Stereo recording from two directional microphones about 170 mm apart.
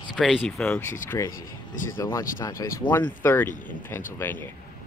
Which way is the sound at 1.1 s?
20° left (ahead or behind).